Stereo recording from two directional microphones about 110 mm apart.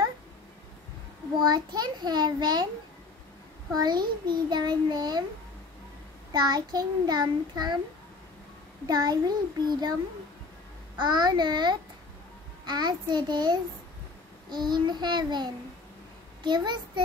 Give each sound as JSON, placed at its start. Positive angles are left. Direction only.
{"t": 1.4, "sound": "child singing", "side_deg": -40}
{"t": 3.7, "sound": "child singing", "side_deg": -40}
{"t": 6.3, "sound": "child singing", "side_deg": -40}
{"t": 8.8, "sound": "child singing", "side_deg": -35}
{"t": 11.0, "sound": "child singing", "side_deg": -40}
{"t": 16.4, "sound": "a child's voice", "side_deg": -45}